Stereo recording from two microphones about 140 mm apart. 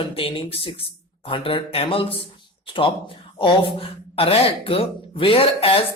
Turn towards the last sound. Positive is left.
turn(degrees=40)  # may be behind; listen again after turning